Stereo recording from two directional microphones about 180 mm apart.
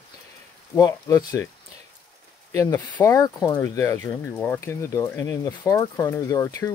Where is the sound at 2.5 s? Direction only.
15° left (ahead or behind).